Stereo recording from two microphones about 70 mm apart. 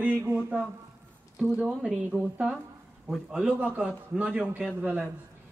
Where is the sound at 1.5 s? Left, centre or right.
Centre.